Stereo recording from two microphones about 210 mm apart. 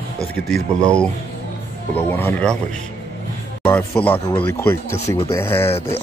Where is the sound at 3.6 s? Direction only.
5° left (ahead or behind).